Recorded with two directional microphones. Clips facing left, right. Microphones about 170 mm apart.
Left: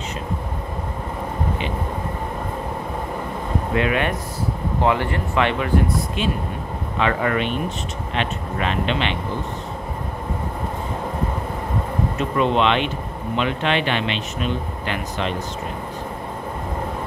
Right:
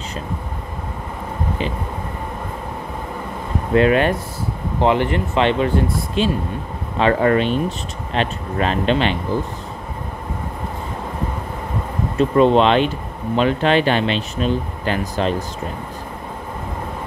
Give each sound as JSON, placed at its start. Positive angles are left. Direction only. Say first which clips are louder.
{"t": 3.7, "sound": "speech", "louder": "right 7 dB", "side_deg": -35}
{"t": 4.8, "sound": "speech", "louder": "right 4 dB", "side_deg": -25}
{"t": 12.2, "sound": "speech", "louder": "right 7 dB", "side_deg": -35}